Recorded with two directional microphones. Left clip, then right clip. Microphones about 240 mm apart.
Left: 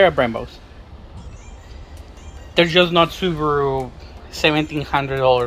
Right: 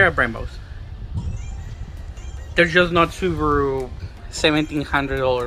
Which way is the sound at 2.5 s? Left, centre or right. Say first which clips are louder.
Left 1 dB; centre.